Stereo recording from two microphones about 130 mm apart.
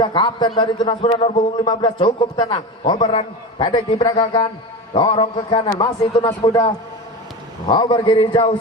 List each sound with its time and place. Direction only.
0.0 s a man's voice: 35° left (ahead or behind)
7.7 s a man's voice: 35° left (ahead or behind)